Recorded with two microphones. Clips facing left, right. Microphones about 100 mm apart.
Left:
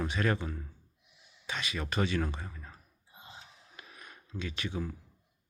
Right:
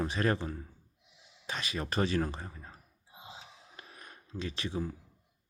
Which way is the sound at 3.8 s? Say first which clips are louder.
Left 1 dB; 35° right (ahead or behind).